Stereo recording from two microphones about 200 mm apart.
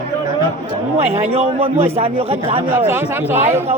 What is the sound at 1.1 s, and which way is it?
Speech, 30° right (ahead or behind).